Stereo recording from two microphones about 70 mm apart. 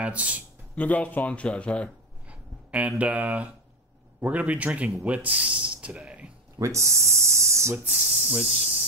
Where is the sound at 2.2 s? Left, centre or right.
Centre.